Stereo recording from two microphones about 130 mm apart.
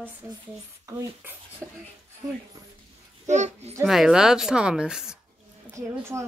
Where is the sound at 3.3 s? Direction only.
60° right (ahead or behind).